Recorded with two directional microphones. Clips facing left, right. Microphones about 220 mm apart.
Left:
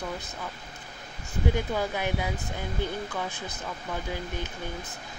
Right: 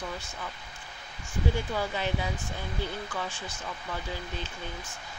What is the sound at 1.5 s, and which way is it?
Speech, 15° left (ahead or behind).